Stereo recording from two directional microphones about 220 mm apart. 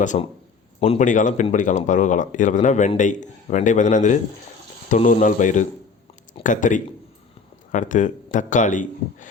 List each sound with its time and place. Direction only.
0.0 s speech: 35° left (ahead or behind)